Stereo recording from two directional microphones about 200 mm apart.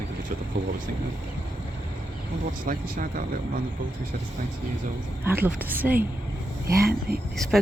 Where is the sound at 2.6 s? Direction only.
45° right (ahead or behind).